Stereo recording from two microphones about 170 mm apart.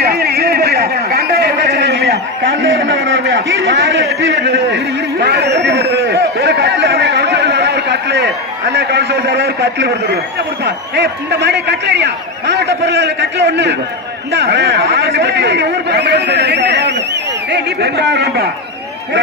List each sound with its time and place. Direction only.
0.0 s a sound: 70° right (ahead or behind); by 2.5 s 90° right
3.1 s a man's voice: 90° right
14.4 s a man's voice: 80° right